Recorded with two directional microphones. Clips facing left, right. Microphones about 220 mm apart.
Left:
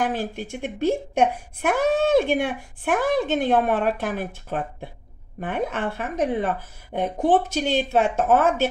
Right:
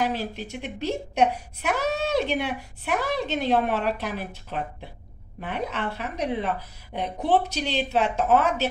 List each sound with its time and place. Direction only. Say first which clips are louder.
0.0 s a woman's voice: left 2 dB; 50° left (ahead or behind)